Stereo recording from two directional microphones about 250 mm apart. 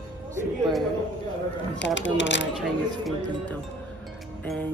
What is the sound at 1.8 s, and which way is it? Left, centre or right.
Speech, left.